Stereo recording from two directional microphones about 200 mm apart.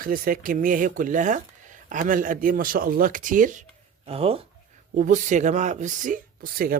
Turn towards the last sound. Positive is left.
turn(degrees=-45)  # may be behind; listen again after turning